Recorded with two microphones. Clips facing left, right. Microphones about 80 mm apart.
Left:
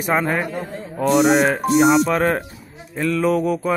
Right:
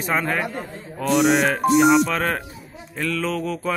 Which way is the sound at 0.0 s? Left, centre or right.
Centre.